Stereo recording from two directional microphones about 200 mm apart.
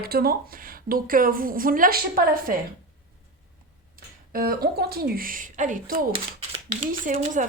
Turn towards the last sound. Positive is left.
turn(degrees=-35)  # may be behind; listen again after turning